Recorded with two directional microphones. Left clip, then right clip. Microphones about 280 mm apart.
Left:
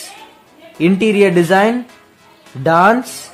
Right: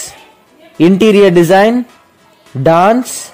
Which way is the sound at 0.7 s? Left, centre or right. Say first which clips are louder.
Right 5 dB; right.